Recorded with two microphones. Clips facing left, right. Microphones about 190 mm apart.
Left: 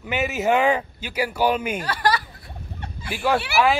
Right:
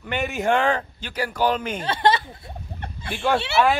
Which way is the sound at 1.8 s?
25° right (ahead or behind).